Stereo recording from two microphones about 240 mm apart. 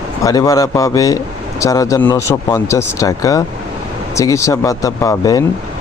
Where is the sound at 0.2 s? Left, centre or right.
Centre.